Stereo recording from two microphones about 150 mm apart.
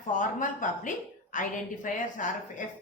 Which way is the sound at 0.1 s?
60° left (ahead or behind).